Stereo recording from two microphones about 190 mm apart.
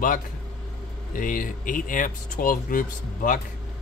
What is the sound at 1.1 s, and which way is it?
Speech, 45° left (ahead or behind).